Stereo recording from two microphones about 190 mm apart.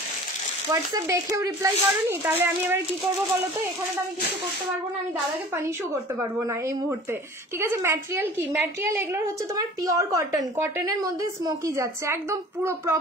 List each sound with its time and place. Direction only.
0.7 s a woman's voice: 20° right (ahead or behind)
6.1 s a woman's voice: 15° right (ahead or behind)